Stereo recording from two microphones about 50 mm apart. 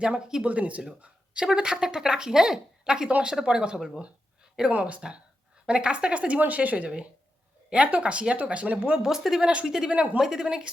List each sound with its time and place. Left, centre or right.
0.0 s speech: centre
0.4 s speech: right; by 4.0 s centre
4.7 s speech: right
9.0 s speech: centre
9.4 s speech: right
10.2 s speech: centre